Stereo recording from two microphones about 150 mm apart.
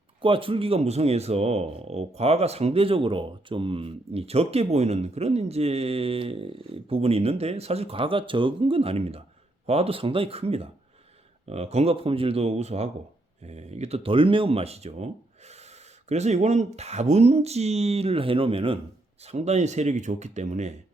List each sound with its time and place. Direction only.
0.2 s speech: 35° right (ahead or behind)